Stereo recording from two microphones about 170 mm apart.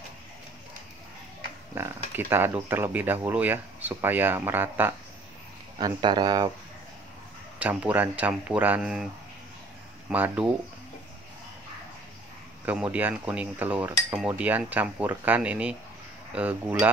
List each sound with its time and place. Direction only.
1.8 s speech: 15° right (ahead or behind)
5.8 s speech: 25° right (ahead or behind)
7.5 s speech: 10° right (ahead or behind)
10.1 s speech: 10° right (ahead or behind)
12.6 s speech: 10° right (ahead or behind)